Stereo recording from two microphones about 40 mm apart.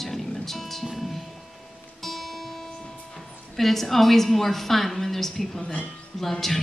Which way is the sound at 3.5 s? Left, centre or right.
Centre.